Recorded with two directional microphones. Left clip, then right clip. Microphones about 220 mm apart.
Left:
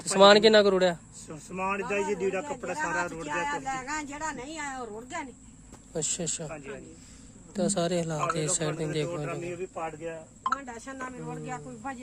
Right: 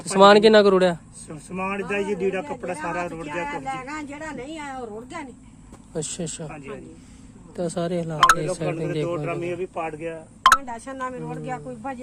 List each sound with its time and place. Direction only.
0.0 s a man's voice: centre (ahead or behind)
3.2 s speech: 20° left (ahead or behind)
5.0 s speech: 5° left (ahead or behind)
7.5 s speech: 5° left (ahead or behind)
9.5 s speech: 40° right (ahead or behind)
10.6 s speech: 30° right (ahead or behind)